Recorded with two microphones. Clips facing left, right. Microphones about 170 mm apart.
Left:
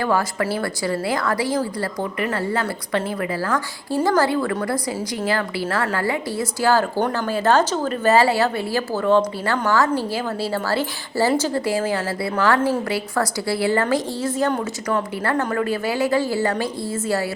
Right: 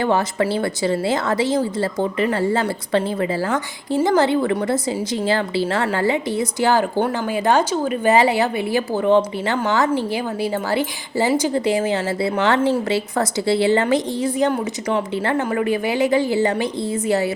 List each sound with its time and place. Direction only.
0.0 s a woman's voice: 25° right (ahead or behind)